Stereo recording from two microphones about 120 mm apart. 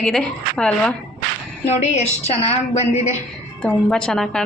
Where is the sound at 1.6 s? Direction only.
70° left (ahead or behind).